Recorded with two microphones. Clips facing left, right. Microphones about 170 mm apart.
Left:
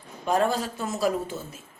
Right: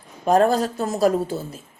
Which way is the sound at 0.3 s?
40° right (ahead or behind).